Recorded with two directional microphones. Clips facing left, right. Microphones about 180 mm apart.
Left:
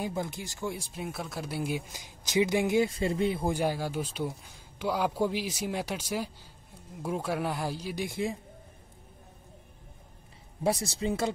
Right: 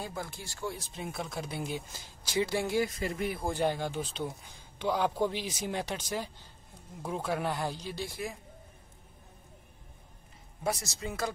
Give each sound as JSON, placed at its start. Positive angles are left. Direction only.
{"t": 0.0, "sound": "speech", "side_deg": 20}
{"t": 3.5, "sound": "speech", "side_deg": 5}
{"t": 10.6, "sound": "speech", "side_deg": 30}